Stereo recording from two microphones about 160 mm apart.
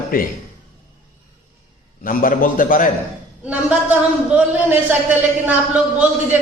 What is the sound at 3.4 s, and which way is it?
A man's voice, 10° right (ahead or behind).